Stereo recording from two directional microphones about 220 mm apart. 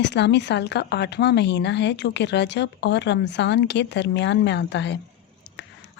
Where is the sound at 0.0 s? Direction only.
50° left (ahead or behind).